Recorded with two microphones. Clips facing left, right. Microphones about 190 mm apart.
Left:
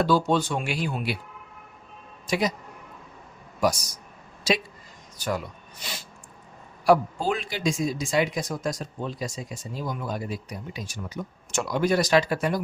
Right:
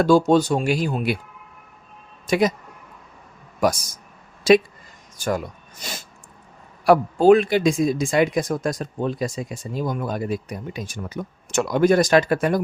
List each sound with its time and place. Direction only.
0.0 s speech: 45° right (ahead or behind)
2.2 s speech: 55° right (ahead or behind)
3.6 s speech: 50° right (ahead or behind)
6.8 s speech: 60° right (ahead or behind)